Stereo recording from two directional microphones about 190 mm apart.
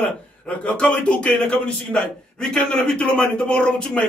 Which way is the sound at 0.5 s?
5° left (ahead or behind).